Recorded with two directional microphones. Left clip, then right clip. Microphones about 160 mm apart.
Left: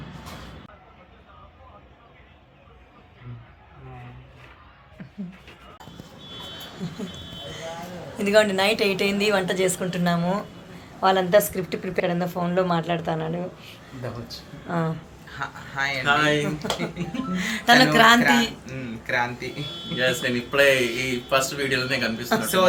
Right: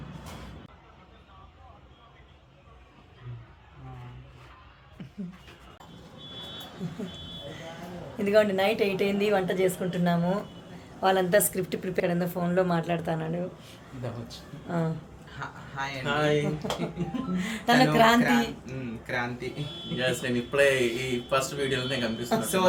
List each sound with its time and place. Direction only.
8.2 s speech: 20° right (ahead or behind)